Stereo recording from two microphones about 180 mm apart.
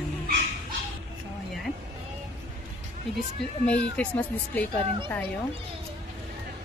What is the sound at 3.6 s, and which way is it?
Speech, 5° left (ahead or behind).